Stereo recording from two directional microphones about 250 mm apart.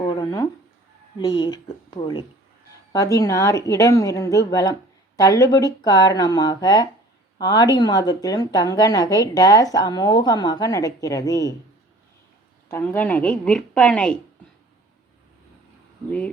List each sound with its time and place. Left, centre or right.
0.0 s a sound: centre
1.2 s speech: centre
12.6 s a woman's voice: centre